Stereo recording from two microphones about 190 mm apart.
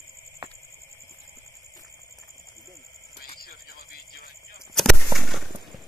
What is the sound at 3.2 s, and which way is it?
Music, 50° left (ahead or behind).